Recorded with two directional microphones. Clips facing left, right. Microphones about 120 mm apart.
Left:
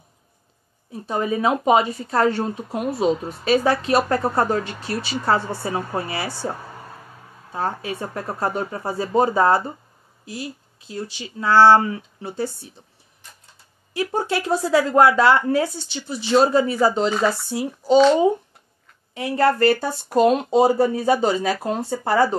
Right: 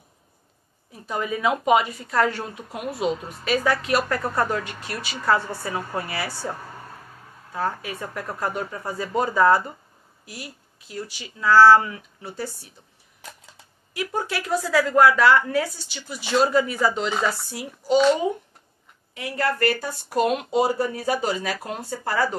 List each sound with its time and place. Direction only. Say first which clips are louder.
1.0 s a woman's voice: left 3 dB; 30° left (ahead or behind)
7.5 s speech: left 2 dB; 30° left (ahead or behind)
13.2 s a sound: right 7 dB; 90° right
13.9 s speech: left 5 dB; 30° left (ahead or behind)
19.1 s speech: left 7 dB; 30° left (ahead or behind)